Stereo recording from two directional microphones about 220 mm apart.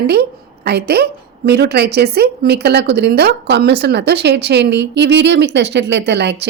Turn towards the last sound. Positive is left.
turn(degrees=-50)  # may be behind; listen again after turning